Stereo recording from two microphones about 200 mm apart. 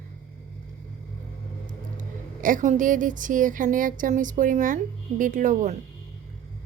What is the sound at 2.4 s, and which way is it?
Speech, 40° right (ahead or behind).